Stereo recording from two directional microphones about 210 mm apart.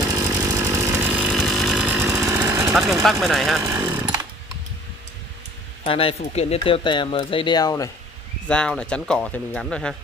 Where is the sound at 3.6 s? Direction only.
15° right (ahead or behind).